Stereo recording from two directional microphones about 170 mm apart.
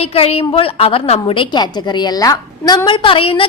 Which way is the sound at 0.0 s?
35° left (ahead or behind).